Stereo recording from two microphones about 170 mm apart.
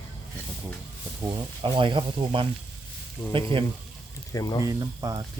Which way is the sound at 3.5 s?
30° right (ahead or behind).